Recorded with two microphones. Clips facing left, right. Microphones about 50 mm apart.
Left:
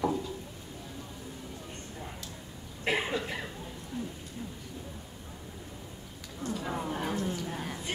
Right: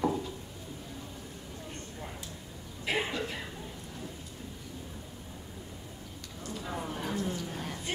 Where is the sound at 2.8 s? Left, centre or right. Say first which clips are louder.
Left 2 dB; left.